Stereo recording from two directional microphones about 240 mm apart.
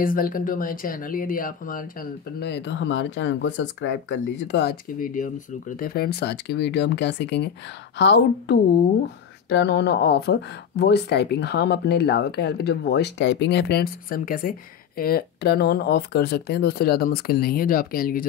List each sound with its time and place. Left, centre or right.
0.0 s speech: left